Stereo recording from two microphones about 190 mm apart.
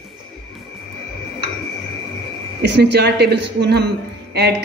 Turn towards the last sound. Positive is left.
turn(degrees=-60)  # may be behind; listen again after turning